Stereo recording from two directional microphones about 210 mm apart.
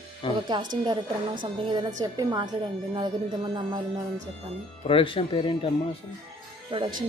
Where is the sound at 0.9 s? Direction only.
20° right (ahead or behind).